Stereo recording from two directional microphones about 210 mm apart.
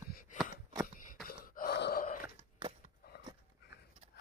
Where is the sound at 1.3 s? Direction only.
45° left (ahead or behind).